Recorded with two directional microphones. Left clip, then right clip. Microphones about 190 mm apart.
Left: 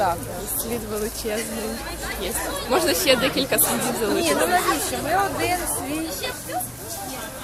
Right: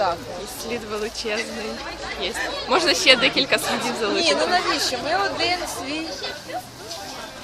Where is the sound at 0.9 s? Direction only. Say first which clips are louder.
Right 1 dB; 10° right (ahead or behind).